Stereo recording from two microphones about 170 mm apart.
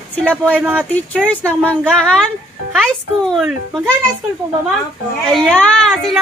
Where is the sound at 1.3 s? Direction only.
5° left (ahead or behind).